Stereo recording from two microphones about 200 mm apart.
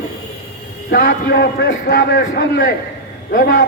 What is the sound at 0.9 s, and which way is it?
A man's voice, 45° left (ahead or behind).